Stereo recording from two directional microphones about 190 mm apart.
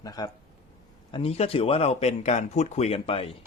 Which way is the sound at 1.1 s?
30° left (ahead or behind).